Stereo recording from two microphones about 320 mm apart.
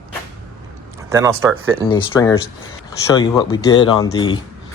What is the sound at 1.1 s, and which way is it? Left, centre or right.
Speech, centre.